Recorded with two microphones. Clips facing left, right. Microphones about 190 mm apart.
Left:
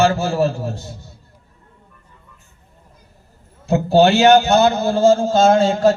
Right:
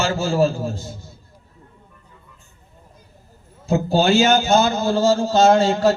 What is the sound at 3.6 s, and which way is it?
A man's voice, 65° left (ahead or behind).